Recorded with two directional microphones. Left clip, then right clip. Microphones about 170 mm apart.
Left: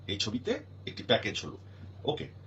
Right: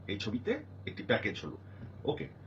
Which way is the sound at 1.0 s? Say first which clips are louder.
Left 3 dB; 30° left (ahead or behind).